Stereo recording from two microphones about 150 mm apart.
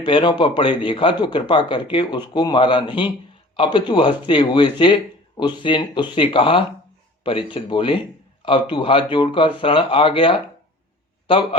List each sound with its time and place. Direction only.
0.0 s speech: 30° left (ahead or behind)